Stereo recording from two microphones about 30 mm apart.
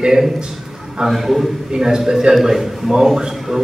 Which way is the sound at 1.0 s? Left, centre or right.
Centre.